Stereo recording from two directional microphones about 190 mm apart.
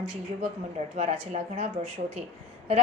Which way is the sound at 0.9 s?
40° right (ahead or behind).